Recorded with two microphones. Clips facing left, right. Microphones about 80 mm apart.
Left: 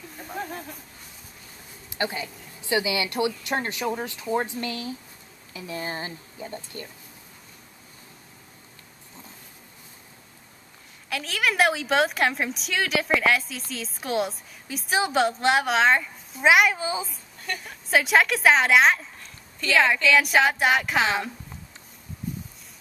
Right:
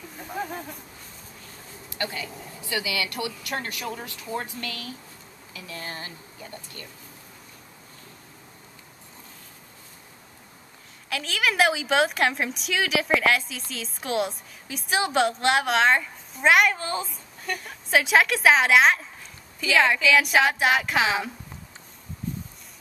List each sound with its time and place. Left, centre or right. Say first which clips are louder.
0.1 s a sound: right 1 dB; centre
1.9 s speech: left 3 dB; left
11.1 s a woman's voice: even; centre